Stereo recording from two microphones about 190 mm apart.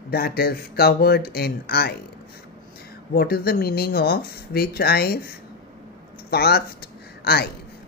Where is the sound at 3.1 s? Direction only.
55° left (ahead or behind).